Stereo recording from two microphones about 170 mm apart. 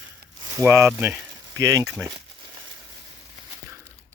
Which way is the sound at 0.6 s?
15° right (ahead or behind).